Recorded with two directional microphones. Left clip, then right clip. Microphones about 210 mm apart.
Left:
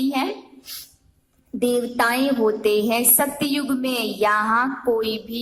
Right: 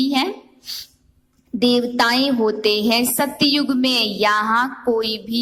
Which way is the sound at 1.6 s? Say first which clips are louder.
Right 3 dB; 40° right (ahead or behind).